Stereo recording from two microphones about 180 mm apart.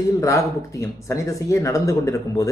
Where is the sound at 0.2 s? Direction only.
20° left (ahead or behind).